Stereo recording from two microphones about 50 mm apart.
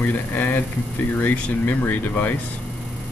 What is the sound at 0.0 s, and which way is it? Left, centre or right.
Speech, left.